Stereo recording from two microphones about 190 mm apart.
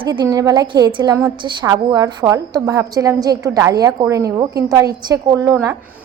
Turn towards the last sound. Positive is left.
turn(degrees=-20)  # may be behind; listen again after turning